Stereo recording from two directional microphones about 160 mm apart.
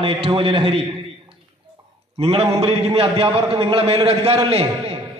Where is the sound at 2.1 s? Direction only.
40° right (ahead or behind).